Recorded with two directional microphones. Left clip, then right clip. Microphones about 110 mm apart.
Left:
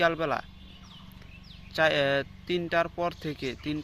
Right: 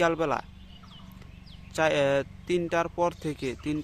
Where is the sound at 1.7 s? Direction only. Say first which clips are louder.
Even; 25° right (ahead or behind).